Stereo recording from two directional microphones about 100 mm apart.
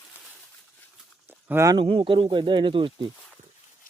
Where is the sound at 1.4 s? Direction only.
25° right (ahead or behind).